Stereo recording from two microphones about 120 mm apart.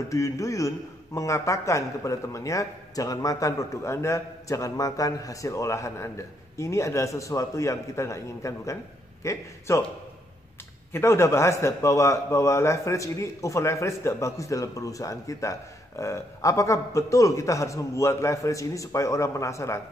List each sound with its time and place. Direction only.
0.1 s a man's voice: 25° left (ahead or behind)
10.9 s a man's voice: 20° left (ahead or behind)